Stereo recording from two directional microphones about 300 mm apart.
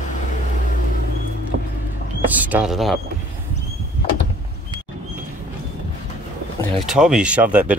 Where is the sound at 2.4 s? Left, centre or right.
Centre.